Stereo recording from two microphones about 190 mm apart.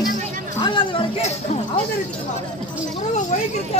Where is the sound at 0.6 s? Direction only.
25° left (ahead or behind).